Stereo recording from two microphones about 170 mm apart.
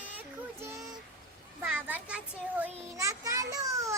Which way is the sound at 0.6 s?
15° right (ahead or behind).